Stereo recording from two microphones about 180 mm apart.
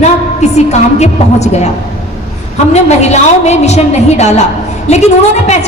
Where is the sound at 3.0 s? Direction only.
40° left (ahead or behind).